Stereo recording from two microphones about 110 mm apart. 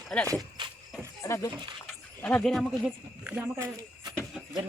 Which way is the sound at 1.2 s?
30° left (ahead or behind).